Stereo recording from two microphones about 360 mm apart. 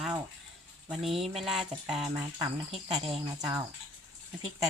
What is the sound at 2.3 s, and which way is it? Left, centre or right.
Speech, centre.